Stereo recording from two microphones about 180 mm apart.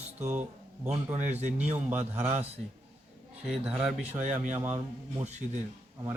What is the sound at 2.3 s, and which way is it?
Speech, 35° right (ahead or behind).